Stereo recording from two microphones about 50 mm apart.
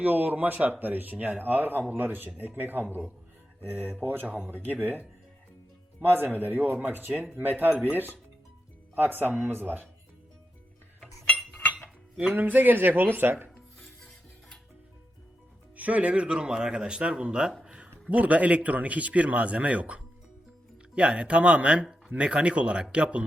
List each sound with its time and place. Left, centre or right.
0.0 s speech: right
6.0 s speech: right
9.0 s speech: right
12.3 s speech: right
15.7 s speech: right
18.1 s speech: right